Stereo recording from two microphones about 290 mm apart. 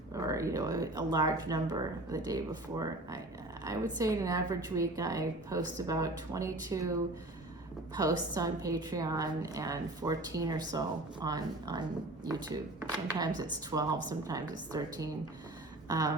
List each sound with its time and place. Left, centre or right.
0.1 s a woman's voice: centre
7.9 s a woman's voice: centre